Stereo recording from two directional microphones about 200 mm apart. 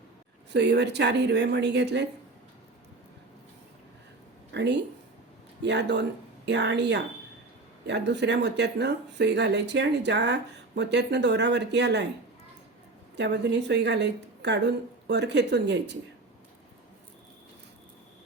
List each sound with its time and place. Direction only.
0.5 s speech: 60° right (ahead or behind)
4.5 s speech: 60° right (ahead or behind)
13.1 s speech: 60° right (ahead or behind)